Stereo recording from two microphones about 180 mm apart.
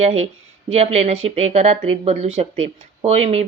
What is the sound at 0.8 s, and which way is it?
Speech, 35° right (ahead or behind).